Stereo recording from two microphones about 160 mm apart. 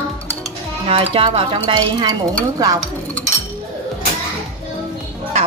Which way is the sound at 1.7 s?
25° right (ahead or behind).